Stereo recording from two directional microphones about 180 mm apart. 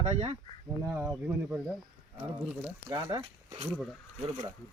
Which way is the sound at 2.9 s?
25° right (ahead or behind).